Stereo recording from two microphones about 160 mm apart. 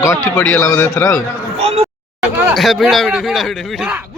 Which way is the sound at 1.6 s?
45° right (ahead or behind).